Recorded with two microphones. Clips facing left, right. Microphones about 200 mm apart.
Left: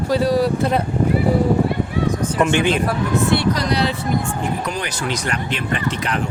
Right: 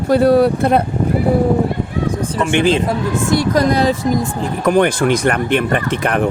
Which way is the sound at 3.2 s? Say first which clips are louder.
Right 7 dB; 45° right (ahead or behind).